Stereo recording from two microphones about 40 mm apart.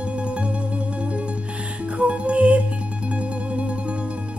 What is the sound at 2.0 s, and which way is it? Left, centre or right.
Music, right.